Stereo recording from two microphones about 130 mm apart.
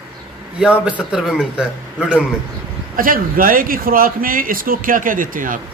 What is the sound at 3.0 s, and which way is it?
Speech, 90° right.